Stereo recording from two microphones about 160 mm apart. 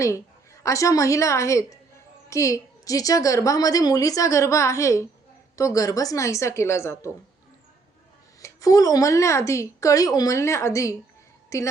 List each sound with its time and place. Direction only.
0.6 s a woman's voice: 20° left (ahead or behind)
8.4 s a woman's voice: 20° left (ahead or behind)